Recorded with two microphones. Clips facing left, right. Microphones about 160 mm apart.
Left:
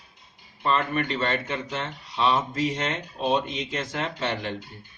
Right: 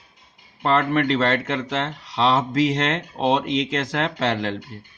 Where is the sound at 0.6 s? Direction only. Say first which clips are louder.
Right 5 dB; 90° right.